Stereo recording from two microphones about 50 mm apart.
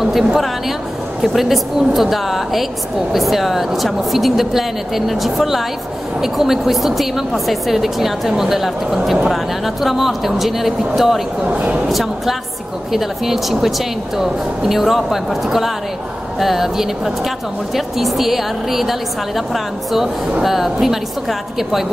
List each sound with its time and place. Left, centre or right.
0.0 s a woman's voice: centre
11.4 s a woman's voice: right
11.9 s a woman's voice: centre